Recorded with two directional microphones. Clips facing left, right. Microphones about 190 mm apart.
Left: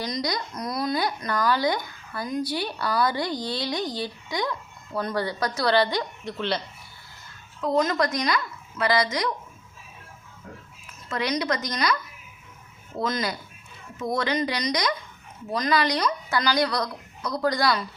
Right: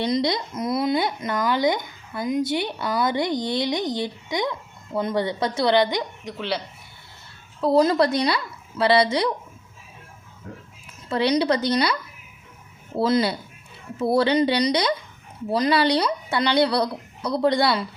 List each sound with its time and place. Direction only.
0.0 s speech: 25° right (ahead or behind); by 6.6 s 10° right (ahead or behind)
7.6 s a woman's voice: 35° right (ahead or behind)
11.1 s a woman's voice: 30° right (ahead or behind)
13.0 s a woman's voice: 30° right (ahead or behind)